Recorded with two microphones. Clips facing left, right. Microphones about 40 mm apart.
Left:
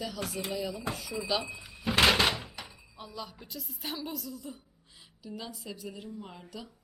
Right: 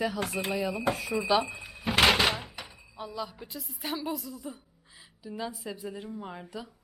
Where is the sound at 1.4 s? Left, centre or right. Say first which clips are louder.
Right 2 dB; centre.